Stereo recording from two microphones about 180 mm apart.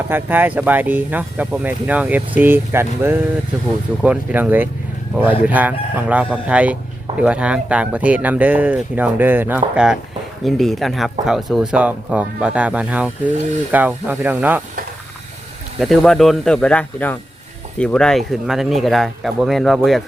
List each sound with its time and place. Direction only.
0.1 s speech: 10° right (ahead or behind)
15.8 s speech: centre (ahead or behind)